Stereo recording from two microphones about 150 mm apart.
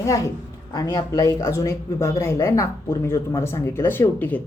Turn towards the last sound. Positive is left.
turn(degrees=10)  # may be behind; listen again after turning